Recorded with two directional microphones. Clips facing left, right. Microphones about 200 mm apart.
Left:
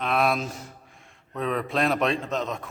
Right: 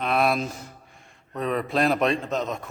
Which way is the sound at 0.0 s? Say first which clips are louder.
Right 1 dB; centre (ahead or behind).